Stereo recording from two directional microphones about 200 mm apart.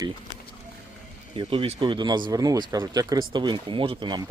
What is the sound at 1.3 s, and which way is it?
Speech, 30° right (ahead or behind).